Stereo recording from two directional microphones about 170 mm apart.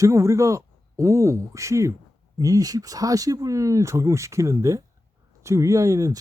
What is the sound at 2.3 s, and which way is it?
Speech, 20° right (ahead or behind).